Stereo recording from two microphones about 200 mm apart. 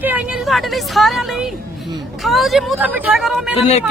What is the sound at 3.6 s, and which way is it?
Speech, 35° left (ahead or behind).